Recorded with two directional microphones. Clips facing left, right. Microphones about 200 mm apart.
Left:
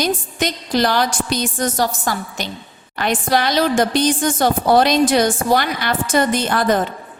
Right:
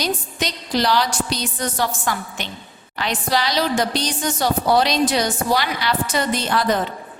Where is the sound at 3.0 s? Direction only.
50° left (ahead or behind).